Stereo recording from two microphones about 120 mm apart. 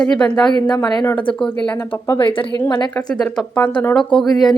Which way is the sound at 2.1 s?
45° left (ahead or behind).